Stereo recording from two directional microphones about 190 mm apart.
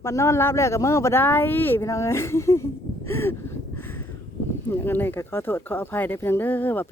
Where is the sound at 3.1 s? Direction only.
15° left (ahead or behind).